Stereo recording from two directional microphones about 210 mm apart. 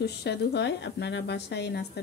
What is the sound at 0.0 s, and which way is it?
A woman's voice, 50° left (ahead or behind).